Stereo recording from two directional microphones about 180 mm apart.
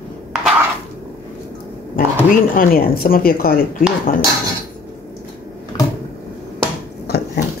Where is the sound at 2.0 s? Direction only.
50° left (ahead or behind).